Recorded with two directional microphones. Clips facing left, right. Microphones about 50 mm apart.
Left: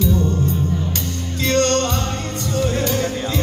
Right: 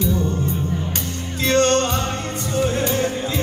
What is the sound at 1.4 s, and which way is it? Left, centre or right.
Music, right.